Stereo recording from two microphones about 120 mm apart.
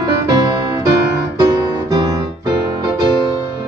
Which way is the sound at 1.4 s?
35° right (ahead or behind).